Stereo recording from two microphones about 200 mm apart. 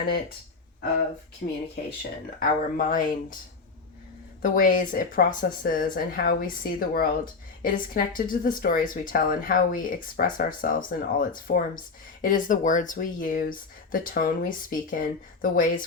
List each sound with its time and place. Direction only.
2.0 s speech: 45° left (ahead or behind)
4.4 s speech: 45° left (ahead or behind)